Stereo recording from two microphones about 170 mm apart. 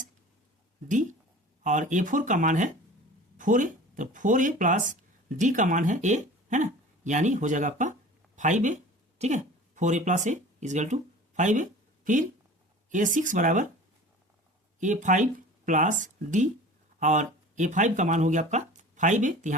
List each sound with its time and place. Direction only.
1.6 s speech: 45° right (ahead or behind)
12.9 s speech: 50° right (ahead or behind)
14.8 s speech: 45° right (ahead or behind)